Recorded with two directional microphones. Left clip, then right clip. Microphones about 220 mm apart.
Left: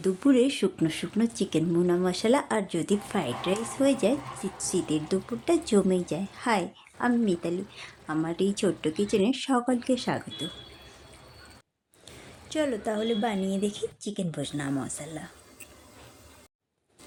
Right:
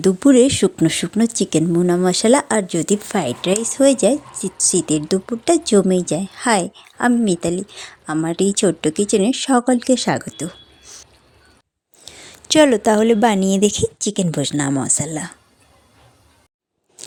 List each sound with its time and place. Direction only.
0.0 s speech: 35° right (ahead or behind)
12.1 s a sound: 25° right (ahead or behind)
12.5 s a woman's voice: 45° right (ahead or behind)